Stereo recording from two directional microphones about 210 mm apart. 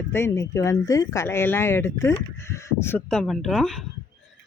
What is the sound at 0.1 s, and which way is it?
Speech, 15° left (ahead or behind).